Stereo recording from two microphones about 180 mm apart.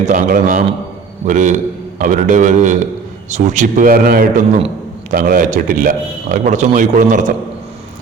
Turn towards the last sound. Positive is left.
turn(degrees=-45)  # may be behind; listen again after turning